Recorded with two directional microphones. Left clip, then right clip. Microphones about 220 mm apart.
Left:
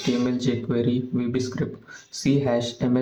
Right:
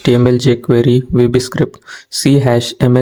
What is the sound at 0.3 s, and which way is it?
Speech, 45° right (ahead or behind).